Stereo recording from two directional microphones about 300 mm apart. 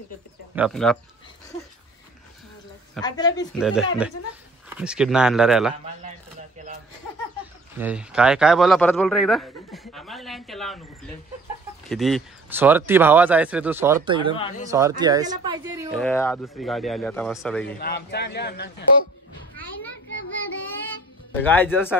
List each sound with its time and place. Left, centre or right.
0.6 s a man's voice: centre
3.0 s speech: centre
3.5 s a man's voice: centre
7.7 s a man's voice: centre
11.9 s speech: centre
15.9 s a man's voice: centre
17.7 s a man's voice: left
20.9 s music: centre